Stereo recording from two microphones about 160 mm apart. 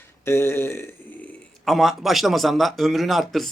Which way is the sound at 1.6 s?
Centre (ahead or behind).